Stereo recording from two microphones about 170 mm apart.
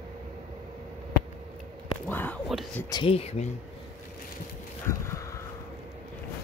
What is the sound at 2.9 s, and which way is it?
Speech, 30° left (ahead or behind).